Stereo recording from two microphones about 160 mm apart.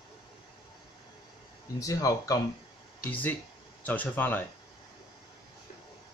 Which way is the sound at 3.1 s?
10° left (ahead or behind).